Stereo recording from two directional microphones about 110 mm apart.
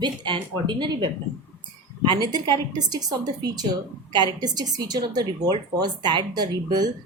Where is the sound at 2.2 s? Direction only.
40° right (ahead or behind).